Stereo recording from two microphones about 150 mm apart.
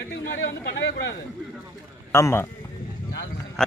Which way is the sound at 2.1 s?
15° left (ahead or behind).